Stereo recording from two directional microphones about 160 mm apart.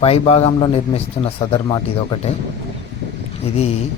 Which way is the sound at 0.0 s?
40° left (ahead or behind).